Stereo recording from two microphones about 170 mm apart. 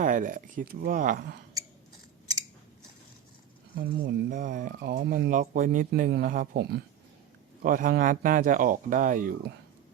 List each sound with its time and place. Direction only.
0.0 s speech: 50° right (ahead or behind)
3.8 s speech: 65° right (ahead or behind)
4.4 s speech: 50° right (ahead or behind); by 6.3 s 65° right (ahead or behind)
6.3 s speech: 55° right (ahead or behind)
7.6 s speech: 55° right (ahead or behind)